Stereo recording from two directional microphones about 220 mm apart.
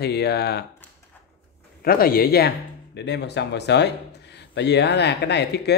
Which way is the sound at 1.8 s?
40° left (ahead or behind).